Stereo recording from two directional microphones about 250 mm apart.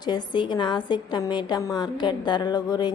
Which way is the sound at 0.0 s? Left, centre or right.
Centre.